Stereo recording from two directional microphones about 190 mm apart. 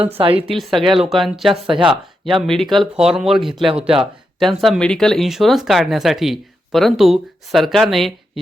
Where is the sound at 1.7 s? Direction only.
25° right (ahead or behind).